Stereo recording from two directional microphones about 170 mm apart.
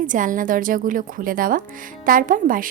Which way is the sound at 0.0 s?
50° right (ahead or behind).